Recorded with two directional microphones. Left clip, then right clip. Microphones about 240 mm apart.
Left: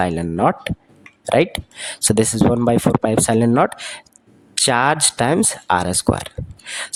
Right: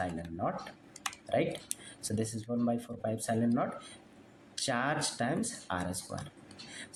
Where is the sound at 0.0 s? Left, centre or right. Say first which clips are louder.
Left 18 dB; left.